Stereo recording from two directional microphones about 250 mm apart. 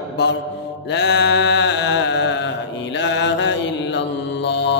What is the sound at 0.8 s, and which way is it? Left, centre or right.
Mantra, left.